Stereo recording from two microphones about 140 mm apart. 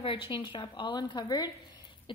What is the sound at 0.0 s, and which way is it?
A woman's voice, 40° left (ahead or behind).